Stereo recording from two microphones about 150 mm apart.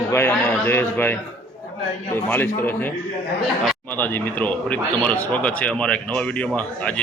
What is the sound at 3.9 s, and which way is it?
A man's voice, 10° left (ahead or behind).